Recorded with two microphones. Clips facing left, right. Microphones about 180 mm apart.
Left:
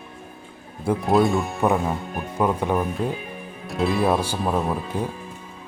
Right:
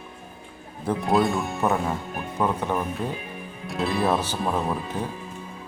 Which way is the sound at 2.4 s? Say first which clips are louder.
Left 3 dB; 10° left (ahead or behind).